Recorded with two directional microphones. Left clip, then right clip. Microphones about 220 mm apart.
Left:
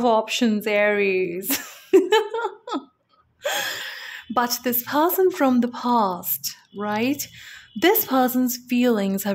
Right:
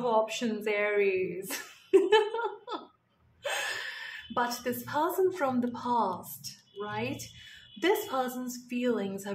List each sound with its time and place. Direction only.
0.0 s a woman's voice: 40° left (ahead or behind)